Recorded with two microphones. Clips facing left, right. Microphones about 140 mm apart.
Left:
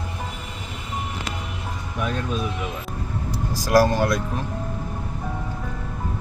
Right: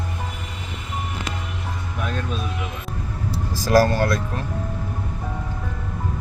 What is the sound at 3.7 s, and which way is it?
Speech, 15° left (ahead or behind).